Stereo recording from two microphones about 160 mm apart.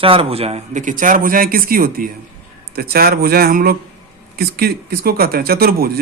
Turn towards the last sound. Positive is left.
turn(degrees=-70)  # may be behind; listen again after turning